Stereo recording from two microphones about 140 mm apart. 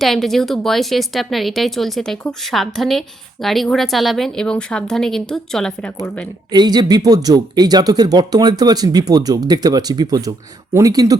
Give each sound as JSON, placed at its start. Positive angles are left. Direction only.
{"t": 0.0, "sound": "speech", "side_deg": 0}
{"t": 6.5, "sound": "speech", "side_deg": -30}